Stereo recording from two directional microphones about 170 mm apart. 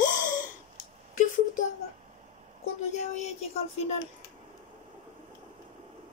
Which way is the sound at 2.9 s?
45° left (ahead or behind).